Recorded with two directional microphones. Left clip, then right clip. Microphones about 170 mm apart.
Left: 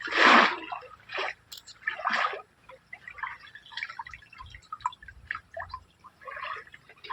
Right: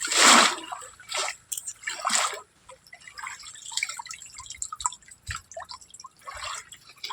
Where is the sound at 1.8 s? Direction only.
15° right (ahead or behind).